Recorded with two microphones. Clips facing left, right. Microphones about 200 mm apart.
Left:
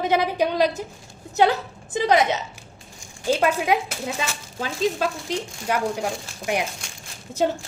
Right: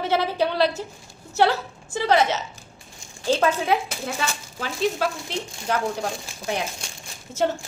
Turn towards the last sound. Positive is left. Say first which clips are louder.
# left 1 dB
turn(degrees=15)  # may be behind; listen again after turning